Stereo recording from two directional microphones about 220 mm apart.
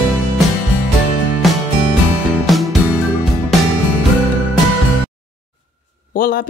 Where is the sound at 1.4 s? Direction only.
Centre (ahead or behind).